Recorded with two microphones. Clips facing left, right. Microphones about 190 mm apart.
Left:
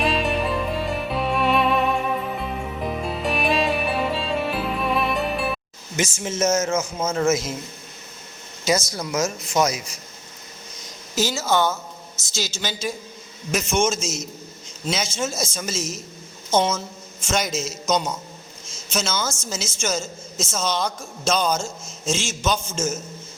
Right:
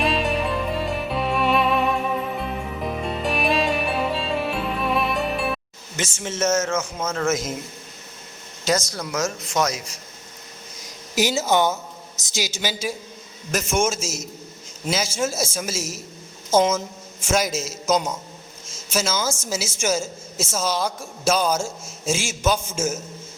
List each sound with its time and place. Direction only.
0.0 s music: centre (ahead or behind)
6.1 s speech: 10° left (ahead or behind)
8.9 s speech: 10° left (ahead or behind)
11.1 s a woman's voice: 15° right (ahead or behind)